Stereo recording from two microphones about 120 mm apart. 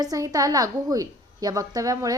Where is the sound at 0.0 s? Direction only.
30° right (ahead or behind).